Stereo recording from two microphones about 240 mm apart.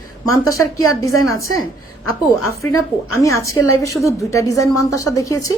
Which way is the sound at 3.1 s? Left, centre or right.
Centre.